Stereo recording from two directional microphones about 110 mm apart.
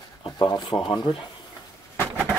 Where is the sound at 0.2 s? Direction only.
45° left (ahead or behind).